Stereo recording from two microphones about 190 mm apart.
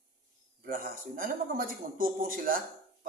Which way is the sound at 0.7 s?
45° right (ahead or behind).